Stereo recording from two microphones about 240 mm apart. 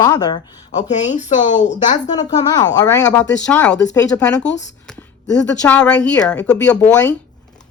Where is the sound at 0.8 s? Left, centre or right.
Left.